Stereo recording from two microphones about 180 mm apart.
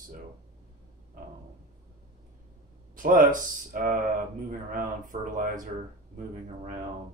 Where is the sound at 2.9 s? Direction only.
50° right (ahead or behind).